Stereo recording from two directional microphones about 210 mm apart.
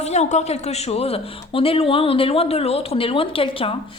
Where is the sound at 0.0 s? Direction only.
30° left (ahead or behind).